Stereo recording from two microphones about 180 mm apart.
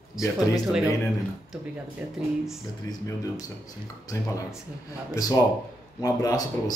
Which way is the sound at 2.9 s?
20° left (ahead or behind).